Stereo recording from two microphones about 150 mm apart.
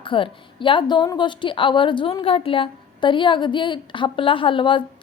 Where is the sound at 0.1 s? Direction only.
35° left (ahead or behind).